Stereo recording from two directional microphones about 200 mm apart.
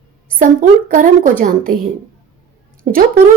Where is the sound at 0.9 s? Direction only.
40° right (ahead or behind).